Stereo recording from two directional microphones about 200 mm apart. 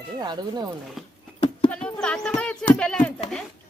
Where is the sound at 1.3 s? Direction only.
25° left (ahead or behind).